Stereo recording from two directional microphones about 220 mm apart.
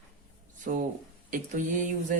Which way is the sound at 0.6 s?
35° right (ahead or behind).